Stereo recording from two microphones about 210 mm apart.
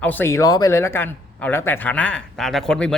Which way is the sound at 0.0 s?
10° left (ahead or behind).